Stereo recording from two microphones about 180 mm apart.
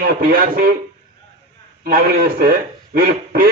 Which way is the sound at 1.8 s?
55° right (ahead or behind).